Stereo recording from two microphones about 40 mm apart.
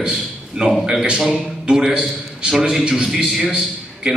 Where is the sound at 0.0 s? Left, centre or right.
Centre.